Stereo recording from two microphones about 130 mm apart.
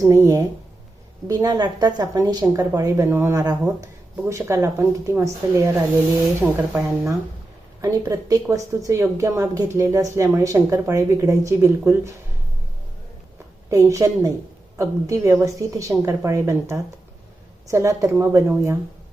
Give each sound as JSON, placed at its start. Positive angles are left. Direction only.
{"t": 0.0, "sound": "speech", "side_deg": -20}
{"t": 13.7, "sound": "speech", "side_deg": -25}